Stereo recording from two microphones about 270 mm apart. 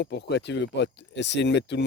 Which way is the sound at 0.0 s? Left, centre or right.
Left.